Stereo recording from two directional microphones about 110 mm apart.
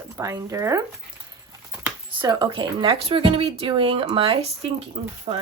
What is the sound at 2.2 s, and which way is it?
Speech, 45° right (ahead or behind).